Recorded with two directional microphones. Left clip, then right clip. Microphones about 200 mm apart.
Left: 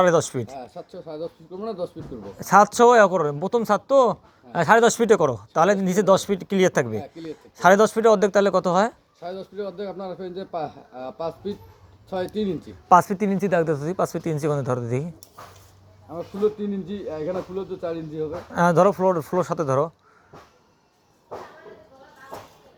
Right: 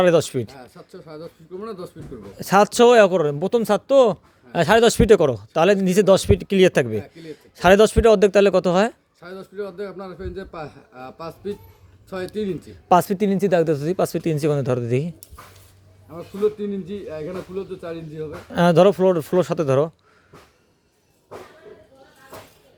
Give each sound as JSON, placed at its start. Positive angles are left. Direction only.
{"t": 0.0, "sound": "a man's voice", "side_deg": -35}
{"t": 2.4, "sound": "speech", "side_deg": -40}
{"t": 9.2, "sound": "a man's voice", "side_deg": -25}
{"t": 12.9, "sound": "speech", "side_deg": -45}
{"t": 16.1, "sound": "a man's voice", "side_deg": -25}
{"t": 18.5, "sound": "speech", "side_deg": -45}